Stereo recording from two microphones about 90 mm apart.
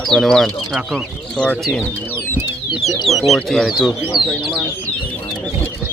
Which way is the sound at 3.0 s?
Centre (ahead or behind).